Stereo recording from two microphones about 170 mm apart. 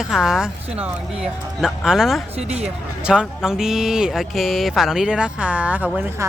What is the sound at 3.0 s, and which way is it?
Speech, 5° right (ahead or behind).